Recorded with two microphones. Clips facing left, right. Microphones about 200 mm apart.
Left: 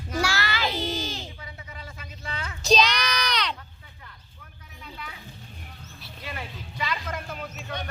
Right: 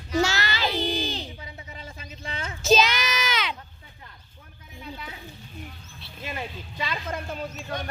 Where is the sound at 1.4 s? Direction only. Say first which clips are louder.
Right 1 dB; 25° right (ahead or behind).